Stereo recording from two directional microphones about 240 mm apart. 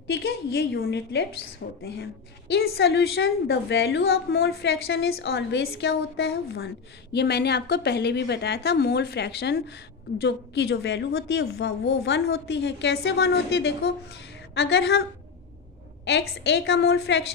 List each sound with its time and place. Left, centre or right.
0.0 s a woman's voice: left
16.1 s a woman's voice: left